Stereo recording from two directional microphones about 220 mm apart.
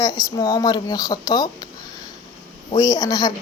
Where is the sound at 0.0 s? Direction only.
15° left (ahead or behind).